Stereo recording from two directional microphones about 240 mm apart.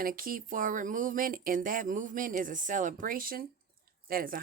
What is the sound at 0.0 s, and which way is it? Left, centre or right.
Speech, right.